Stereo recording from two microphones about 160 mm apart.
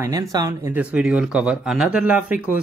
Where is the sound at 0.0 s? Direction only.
20° right (ahead or behind).